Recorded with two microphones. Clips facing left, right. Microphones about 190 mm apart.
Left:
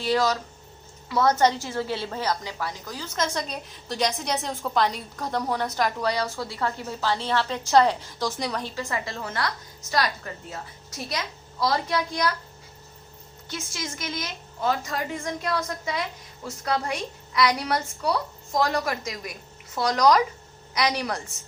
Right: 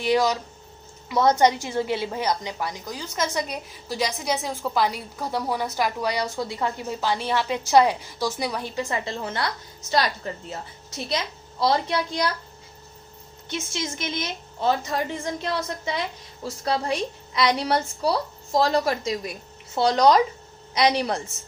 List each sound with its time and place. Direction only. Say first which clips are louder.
0.0 s a woman's voice: right 2 dB; 15° right (ahead or behind)
13.5 s a woman's voice: right 4 dB; 25° right (ahead or behind)